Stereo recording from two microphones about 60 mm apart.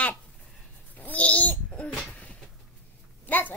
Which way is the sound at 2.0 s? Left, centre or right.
Left.